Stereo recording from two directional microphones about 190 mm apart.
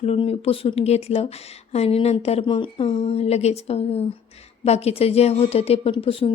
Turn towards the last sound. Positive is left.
turn(degrees=30)  # may be behind; listen again after turning